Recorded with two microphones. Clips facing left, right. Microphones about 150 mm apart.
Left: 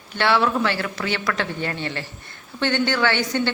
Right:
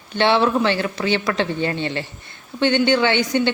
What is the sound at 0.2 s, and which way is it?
A woman's voice, 20° right (ahead or behind).